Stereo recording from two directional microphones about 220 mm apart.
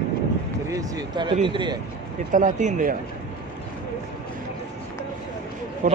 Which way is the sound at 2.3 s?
35° right (ahead or behind).